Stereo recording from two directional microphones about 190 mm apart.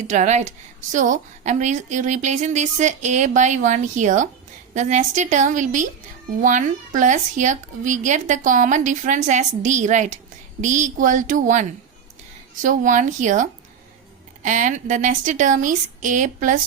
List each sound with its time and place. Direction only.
0.1 s a woman's voice: 40° right (ahead or behind)
12.6 s a woman's voice: 45° right (ahead or behind)